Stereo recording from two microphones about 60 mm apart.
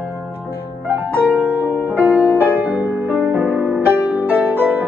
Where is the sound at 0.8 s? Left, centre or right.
Right.